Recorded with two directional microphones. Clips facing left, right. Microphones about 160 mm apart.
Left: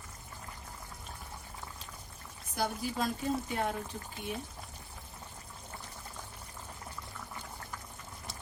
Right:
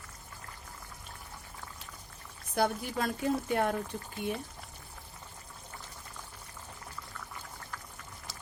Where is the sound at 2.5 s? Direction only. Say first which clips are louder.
Right 4 dB; 60° right (ahead or behind).